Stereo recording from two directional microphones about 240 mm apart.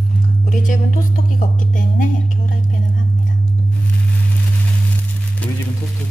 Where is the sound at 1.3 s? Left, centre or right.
Left.